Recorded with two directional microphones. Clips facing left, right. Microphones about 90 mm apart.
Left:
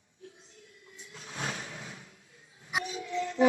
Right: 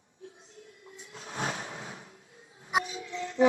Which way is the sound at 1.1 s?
35° right (ahead or behind).